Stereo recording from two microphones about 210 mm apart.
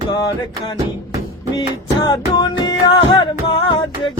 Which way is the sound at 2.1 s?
20° left (ahead or behind).